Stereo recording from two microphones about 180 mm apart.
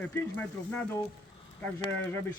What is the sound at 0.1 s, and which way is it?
Speech, 10° left (ahead or behind).